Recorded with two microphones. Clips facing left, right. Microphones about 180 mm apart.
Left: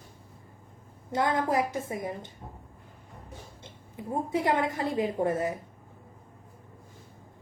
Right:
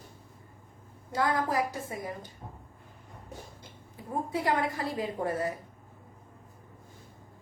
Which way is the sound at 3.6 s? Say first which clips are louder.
Left 8 dB; 25° left (ahead or behind).